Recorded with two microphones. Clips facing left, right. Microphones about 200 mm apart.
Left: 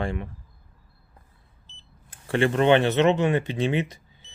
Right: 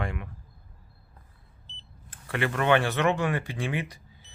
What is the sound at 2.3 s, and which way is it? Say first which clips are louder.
Speech: left 5 dB; 25° left (ahead or behind).